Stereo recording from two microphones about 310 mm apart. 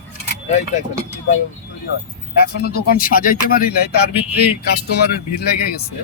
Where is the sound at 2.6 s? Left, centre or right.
Left.